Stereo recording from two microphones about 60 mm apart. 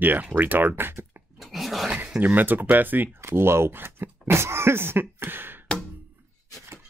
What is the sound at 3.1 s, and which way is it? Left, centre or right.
Speech, right.